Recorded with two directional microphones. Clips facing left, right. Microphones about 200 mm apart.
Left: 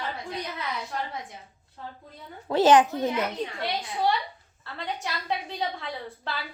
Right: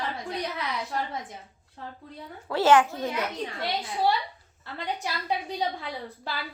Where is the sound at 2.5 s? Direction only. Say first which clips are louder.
Left 2 dB; 20° left (ahead or behind).